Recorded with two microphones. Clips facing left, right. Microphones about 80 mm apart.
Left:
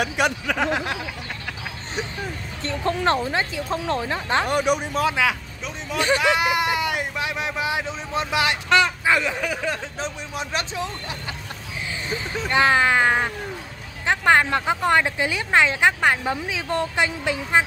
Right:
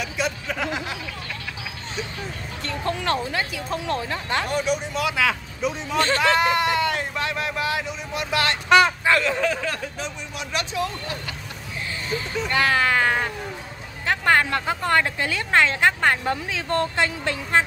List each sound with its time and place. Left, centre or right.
0.0 s speech: left
2.8 s speech: left
4.5 s speech: left
5.6 s speech: centre
5.9 s speech: centre
8.6 s speech: centre
9.0 s speech: centre
9.9 s speech: left
12.4 s speech: left